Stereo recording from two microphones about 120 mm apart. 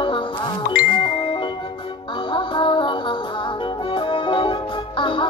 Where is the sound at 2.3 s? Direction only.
45° left (ahead or behind).